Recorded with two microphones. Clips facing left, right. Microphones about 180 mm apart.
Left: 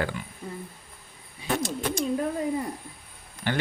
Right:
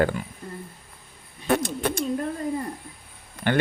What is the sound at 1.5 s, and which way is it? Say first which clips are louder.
Speech: right 4 dB; 60° right (ahead or behind).